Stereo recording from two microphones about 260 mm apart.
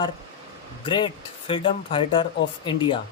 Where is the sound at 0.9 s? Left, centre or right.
Centre.